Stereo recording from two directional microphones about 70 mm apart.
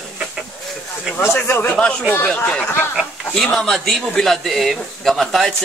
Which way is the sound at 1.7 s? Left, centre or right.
Centre.